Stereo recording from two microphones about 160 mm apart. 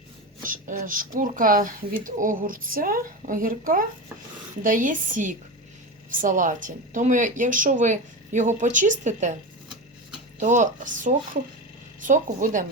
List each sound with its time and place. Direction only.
0.4 s speech: 60° right (ahead or behind)
10.4 s speech: 50° right (ahead or behind)